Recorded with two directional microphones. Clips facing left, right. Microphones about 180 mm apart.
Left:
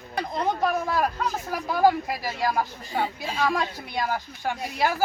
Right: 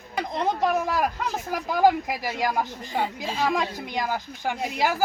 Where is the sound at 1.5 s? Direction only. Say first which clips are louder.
Right 1 dB; 15° right (ahead or behind).